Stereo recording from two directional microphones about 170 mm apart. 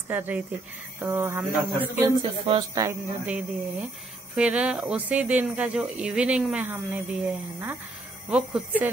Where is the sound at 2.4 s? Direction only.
20° right (ahead or behind).